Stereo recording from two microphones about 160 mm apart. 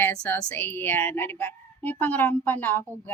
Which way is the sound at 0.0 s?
15° left (ahead or behind).